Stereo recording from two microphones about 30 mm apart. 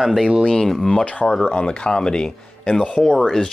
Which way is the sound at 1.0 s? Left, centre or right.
Left.